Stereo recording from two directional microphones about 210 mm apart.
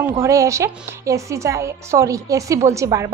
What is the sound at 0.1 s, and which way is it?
A woman's voice, 15° right (ahead or behind).